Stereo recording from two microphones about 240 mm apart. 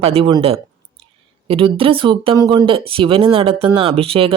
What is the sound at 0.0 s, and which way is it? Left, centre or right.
A woman's voice, right.